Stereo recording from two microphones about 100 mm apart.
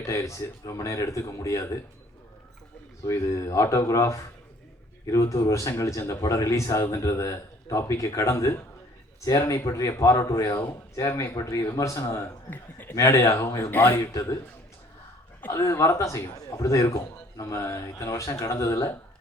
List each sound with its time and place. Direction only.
0.0 s speech: 30° left (ahead or behind)
3.0 s speech: 30° left (ahead or behind)
9.6 s speech: 30° left (ahead or behind)
14.1 s speech: 35° left (ahead or behind)
15.5 s speech: 30° left (ahead or behind)